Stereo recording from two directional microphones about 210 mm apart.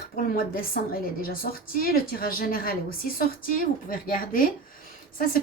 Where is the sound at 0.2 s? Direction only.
45° left (ahead or behind).